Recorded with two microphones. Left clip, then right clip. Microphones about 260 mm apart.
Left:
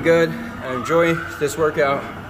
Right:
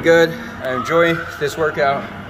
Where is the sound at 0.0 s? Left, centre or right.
Centre.